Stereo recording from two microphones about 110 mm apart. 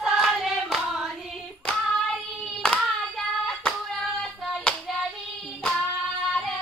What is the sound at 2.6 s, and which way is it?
Hands, 5° left (ahead or behind).